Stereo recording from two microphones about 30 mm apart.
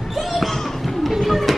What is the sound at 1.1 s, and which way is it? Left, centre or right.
Music, centre.